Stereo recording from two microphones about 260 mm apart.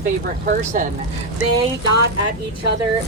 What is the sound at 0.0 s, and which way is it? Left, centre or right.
Speech, right.